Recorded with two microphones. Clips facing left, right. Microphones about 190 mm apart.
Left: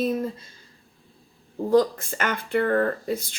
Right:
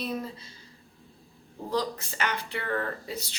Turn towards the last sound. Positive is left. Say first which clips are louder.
# left 8 dB
turn(degrees=50)  # may be behind; listen again after turning